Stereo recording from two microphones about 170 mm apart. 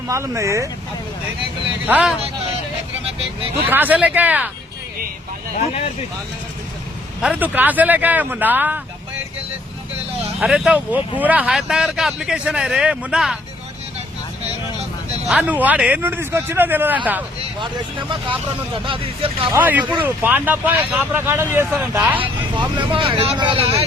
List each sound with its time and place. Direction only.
0.1 s speech: 15° right (ahead or behind)
1.9 s speech: 10° right (ahead or behind)
3.7 s speech: 10° right (ahead or behind)
7.2 s speech: 5° right (ahead or behind)
10.4 s speech: 5° right (ahead or behind)
15.3 s speech: 5° right (ahead or behind)
18.9 s speech: 30° right (ahead or behind)
19.5 s speech: 10° right (ahead or behind)
22.2 s speech: 30° right (ahead or behind)